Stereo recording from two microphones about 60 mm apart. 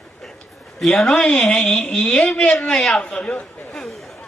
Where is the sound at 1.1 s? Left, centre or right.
Centre.